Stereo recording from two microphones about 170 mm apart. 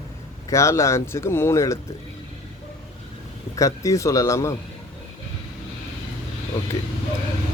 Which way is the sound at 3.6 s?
20° left (ahead or behind).